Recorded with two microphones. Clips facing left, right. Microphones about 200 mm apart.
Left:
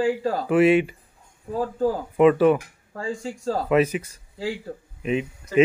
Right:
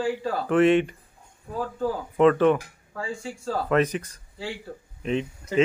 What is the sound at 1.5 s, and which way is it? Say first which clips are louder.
Speech: left 4 dB; 40° left (ahead or behind).